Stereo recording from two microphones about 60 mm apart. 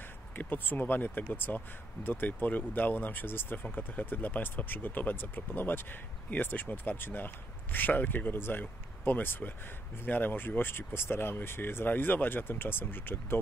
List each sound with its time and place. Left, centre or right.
0.4 s speech: left